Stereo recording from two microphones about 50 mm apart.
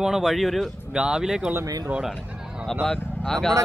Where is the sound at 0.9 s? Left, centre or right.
Centre.